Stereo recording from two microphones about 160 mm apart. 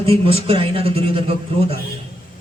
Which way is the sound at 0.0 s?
35° right (ahead or behind).